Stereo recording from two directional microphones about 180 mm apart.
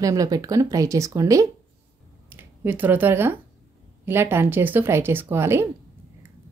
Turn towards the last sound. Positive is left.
turn(degrees=-15)  # may be behind; listen again after turning